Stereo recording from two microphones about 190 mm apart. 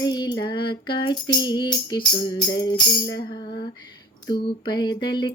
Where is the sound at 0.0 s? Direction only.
20° left (ahead or behind).